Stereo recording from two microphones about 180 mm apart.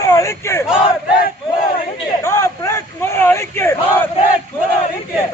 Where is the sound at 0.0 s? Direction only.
15° left (ahead or behind).